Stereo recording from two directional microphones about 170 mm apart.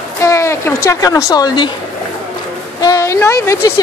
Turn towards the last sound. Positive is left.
turn(degrees=15)  # may be behind; listen again after turning